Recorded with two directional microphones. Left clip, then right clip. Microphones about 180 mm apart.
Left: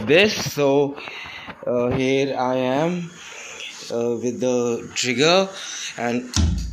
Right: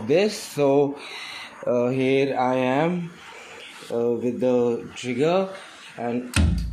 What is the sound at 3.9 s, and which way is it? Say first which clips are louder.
Speech: even; 15° left (ahead or behind).